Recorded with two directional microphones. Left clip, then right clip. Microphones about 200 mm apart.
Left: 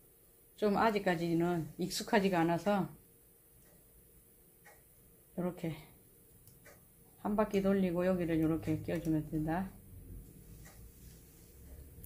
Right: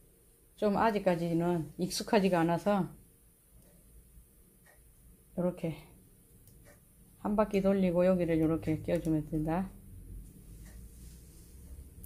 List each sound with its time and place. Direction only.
0.6 s speech: 25° right (ahead or behind)
5.3 s speech: 30° right (ahead or behind)
7.2 s speech: 35° right (ahead or behind)